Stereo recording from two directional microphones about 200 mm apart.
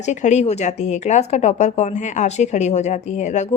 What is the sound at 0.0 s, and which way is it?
Speech, 35° left (ahead or behind).